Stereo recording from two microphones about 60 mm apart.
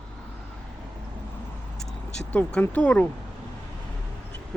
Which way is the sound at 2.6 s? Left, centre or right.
Left.